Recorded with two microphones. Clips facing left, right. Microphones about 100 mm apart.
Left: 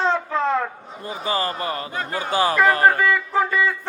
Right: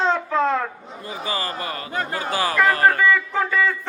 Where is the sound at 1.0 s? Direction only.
30° left (ahead or behind).